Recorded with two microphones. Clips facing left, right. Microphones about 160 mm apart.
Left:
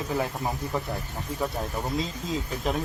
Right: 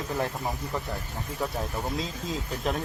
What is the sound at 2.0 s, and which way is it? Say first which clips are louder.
Speech: left 2 dB; centre (ahead or behind).